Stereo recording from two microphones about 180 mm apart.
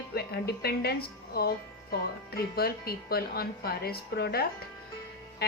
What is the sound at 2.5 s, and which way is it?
A woman's voice, 60° left (ahead or behind).